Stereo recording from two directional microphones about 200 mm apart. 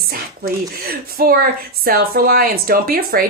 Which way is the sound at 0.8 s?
50° right (ahead or behind).